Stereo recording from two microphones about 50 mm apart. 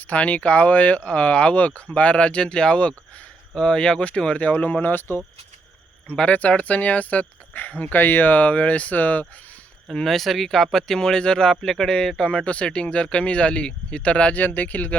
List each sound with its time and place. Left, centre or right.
0.1 s speech: left
6.1 s speech: left
9.9 s speech: centre
12.5 s speech: left
14.3 s speech: left